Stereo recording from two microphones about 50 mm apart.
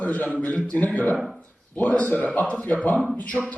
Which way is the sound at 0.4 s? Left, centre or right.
Left.